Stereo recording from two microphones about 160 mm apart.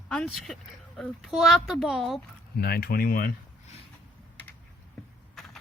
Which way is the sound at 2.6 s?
75° left (ahead or behind).